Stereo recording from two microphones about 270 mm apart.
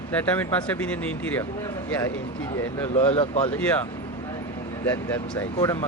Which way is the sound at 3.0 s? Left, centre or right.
Left.